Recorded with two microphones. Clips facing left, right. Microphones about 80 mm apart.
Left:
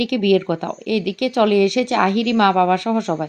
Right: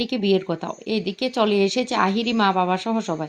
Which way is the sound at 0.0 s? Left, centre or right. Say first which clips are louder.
Left 4 dB; left.